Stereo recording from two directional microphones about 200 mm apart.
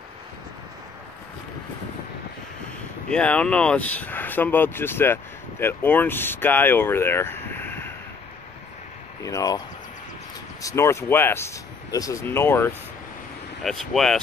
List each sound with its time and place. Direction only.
3.1 s speech: 5° left (ahead or behind)
9.2 s speech: 15° left (ahead or behind)
10.6 s speech: 15° left (ahead or behind)
13.6 s speech: centre (ahead or behind)